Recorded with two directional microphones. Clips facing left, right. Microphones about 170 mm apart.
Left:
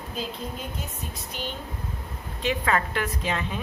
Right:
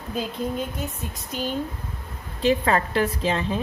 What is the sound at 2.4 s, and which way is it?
A woman's voice, 35° right (ahead or behind).